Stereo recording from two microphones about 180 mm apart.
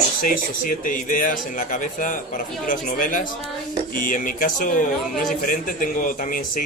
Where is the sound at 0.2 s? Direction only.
50° left (ahead or behind).